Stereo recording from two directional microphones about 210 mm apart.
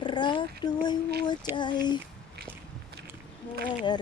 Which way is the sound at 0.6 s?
20° left (ahead or behind).